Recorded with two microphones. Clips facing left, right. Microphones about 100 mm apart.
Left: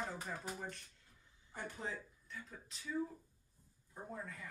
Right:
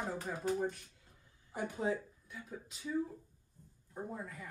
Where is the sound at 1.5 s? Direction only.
15° right (ahead or behind).